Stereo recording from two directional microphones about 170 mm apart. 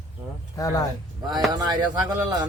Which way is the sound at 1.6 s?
25° right (ahead or behind).